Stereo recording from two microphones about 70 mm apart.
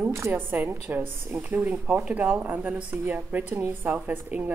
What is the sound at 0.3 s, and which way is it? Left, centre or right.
A woman's voice, right.